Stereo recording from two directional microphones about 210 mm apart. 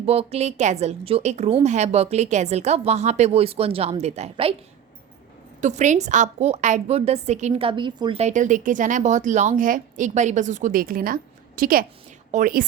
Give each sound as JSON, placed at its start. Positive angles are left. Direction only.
{"t": 0.0, "sound": "a woman's voice", "side_deg": -30}
{"t": 5.5, "sound": "a woman's voice", "side_deg": -35}